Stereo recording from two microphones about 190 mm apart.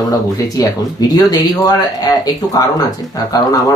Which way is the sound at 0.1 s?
20° left (ahead or behind).